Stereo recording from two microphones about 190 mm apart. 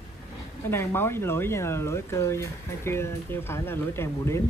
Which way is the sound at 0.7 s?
10° left (ahead or behind).